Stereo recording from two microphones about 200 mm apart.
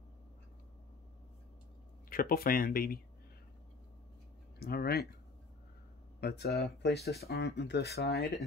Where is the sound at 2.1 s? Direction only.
45° left (ahead or behind).